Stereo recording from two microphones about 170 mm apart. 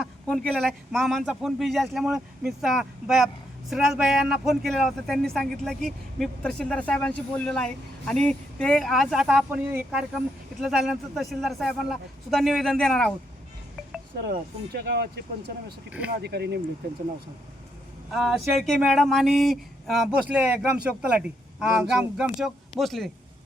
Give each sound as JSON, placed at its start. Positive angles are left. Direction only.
{"t": 0.0, "sound": "a sound", "side_deg": 5}
{"t": 0.5, "sound": "speech", "side_deg": 0}
{"t": 14.7, "sound": "speech", "side_deg": -65}
{"t": 16.0, "sound": "speech", "side_deg": -70}
{"t": 18.1, "sound": "speech", "side_deg": 0}